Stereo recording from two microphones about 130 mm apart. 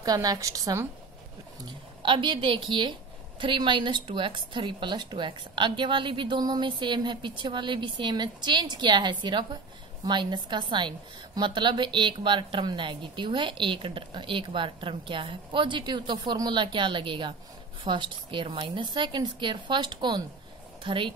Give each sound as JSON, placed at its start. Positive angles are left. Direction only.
{"t": 0.0, "sound": "a woman's voice", "side_deg": -30}
{"t": 2.0, "sound": "a woman's voice", "side_deg": -40}